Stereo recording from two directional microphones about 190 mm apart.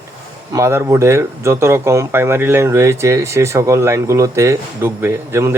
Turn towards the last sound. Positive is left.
turn(degrees=-15)  # may be behind; listen again after turning